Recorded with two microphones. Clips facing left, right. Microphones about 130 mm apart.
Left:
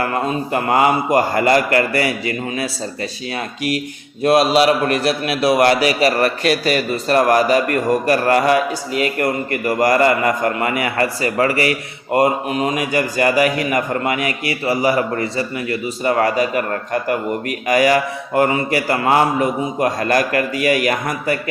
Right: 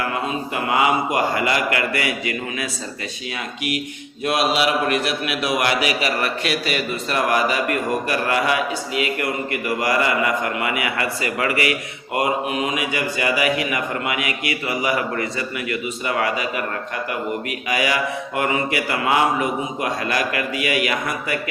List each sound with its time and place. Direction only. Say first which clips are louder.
0.0 s a man's voice: left 4 dB; 45° left (ahead or behind)
4.2 s a man's voice: left 7 dB; 35° left (ahead or behind)